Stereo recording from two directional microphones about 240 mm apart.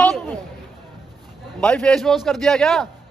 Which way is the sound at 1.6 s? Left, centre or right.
Centre.